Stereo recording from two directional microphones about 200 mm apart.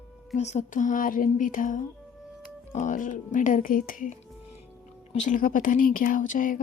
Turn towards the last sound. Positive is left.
turn(degrees=40)  # may be behind; listen again after turning